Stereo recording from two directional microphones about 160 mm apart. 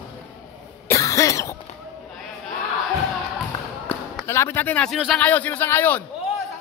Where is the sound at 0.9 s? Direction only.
20° left (ahead or behind).